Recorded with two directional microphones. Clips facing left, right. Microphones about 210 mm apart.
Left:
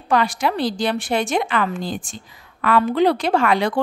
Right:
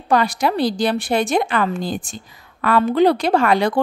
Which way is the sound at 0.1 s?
40° right (ahead or behind).